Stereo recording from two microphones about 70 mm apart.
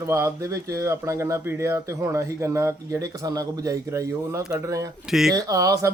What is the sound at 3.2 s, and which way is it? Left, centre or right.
Speech, right.